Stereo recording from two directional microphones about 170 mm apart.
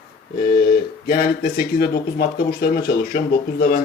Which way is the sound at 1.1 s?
65° left (ahead or behind).